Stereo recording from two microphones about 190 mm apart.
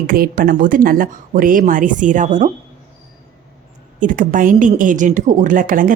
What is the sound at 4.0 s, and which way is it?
Speech, 45° right (ahead or behind).